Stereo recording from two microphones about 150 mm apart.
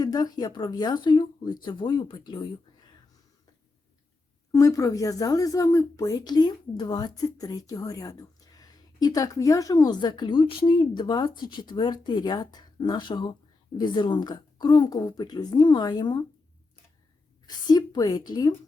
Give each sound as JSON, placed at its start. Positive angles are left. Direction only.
{"t": 0.0, "sound": "speech", "side_deg": 25}
{"t": 4.5, "sound": "speech", "side_deg": 25}
{"t": 17.4, "sound": "speech", "side_deg": 25}